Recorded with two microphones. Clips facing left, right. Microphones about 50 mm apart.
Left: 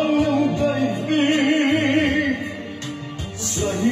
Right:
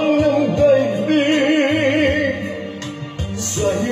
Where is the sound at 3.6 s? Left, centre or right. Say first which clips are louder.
Right 5 dB; centre.